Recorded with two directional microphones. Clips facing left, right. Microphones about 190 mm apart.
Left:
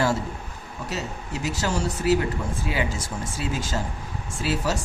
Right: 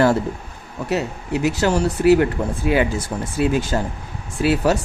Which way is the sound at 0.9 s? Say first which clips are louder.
Right 9 dB; 65° right (ahead or behind).